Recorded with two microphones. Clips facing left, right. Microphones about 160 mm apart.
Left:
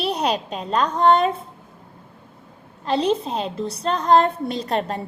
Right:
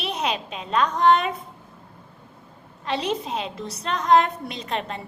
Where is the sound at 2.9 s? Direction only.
30° left (ahead or behind).